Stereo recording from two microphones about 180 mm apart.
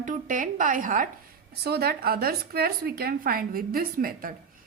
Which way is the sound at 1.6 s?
60° right (ahead or behind).